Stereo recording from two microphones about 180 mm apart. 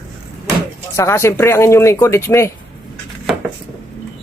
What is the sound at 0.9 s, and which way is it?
Speech, 15° left (ahead or behind).